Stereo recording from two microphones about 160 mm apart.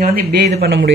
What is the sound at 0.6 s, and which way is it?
Speech, 90° right.